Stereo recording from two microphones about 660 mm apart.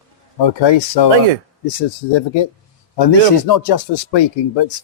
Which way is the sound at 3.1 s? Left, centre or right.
Left.